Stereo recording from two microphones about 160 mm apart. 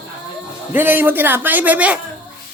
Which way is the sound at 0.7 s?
15° right (ahead or behind).